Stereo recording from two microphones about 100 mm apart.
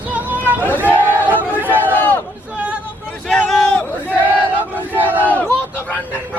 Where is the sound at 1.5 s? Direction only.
20° right (ahead or behind).